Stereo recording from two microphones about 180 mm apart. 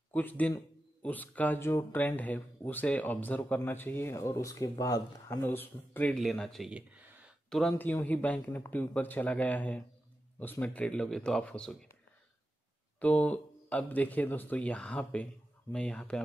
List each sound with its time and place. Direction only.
0.1 s speech: 10° left (ahead or behind)
13.0 s speech: 5° left (ahead or behind)